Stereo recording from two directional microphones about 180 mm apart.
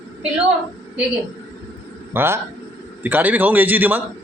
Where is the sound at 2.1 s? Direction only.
15° right (ahead or behind).